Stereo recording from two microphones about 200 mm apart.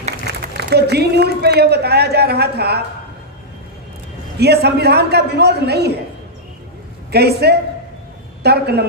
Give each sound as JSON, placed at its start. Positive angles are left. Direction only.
{"t": 0.6, "sound": "a woman's voice", "side_deg": -55}
{"t": 4.4, "sound": "a man's voice", "side_deg": -55}
{"t": 7.1, "sound": "a woman's voice", "side_deg": -55}